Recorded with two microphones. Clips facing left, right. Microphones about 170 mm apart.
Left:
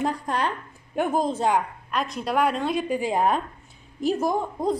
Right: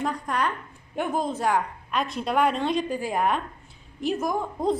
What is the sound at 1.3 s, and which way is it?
Speech, 25° left (ahead or behind).